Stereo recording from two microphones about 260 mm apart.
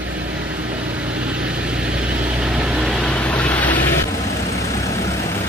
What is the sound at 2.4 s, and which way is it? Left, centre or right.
Vehicle, centre.